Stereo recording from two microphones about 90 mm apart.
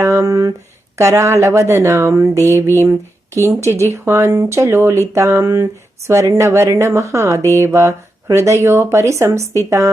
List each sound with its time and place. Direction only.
0.0 s speech: 35° right (ahead or behind)